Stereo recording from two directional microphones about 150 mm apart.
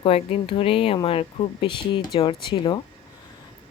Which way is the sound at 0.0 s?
40° left (ahead or behind).